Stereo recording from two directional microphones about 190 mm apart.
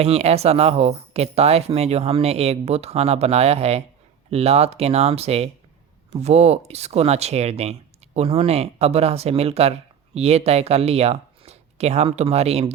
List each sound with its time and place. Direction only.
0.0 s speech: 35° right (ahead or behind)